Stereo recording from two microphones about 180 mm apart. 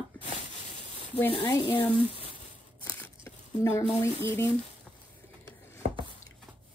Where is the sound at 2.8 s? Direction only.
10° left (ahead or behind).